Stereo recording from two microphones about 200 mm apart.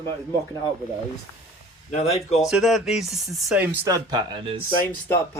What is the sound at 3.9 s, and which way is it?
Speech, 20° right (ahead or behind).